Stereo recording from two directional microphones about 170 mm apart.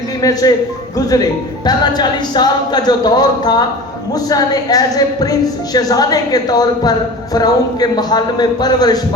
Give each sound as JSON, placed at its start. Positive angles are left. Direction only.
{"t": 0.2, "sound": "a woman's voice", "side_deg": 20}